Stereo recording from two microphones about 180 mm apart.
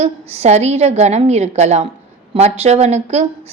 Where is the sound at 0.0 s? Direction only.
40° right (ahead or behind).